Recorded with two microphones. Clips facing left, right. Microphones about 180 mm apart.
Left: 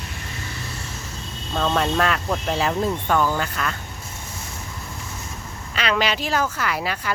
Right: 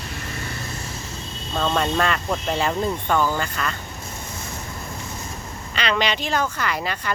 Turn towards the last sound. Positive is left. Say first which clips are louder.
# even
turn(degrees=5)  # may be behind; listen again after turning